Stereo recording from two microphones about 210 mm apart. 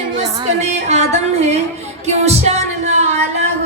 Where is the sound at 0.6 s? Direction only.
30° right (ahead or behind).